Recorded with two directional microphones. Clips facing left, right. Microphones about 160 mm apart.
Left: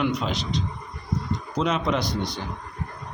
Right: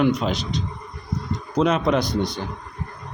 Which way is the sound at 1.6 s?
50° right (ahead or behind).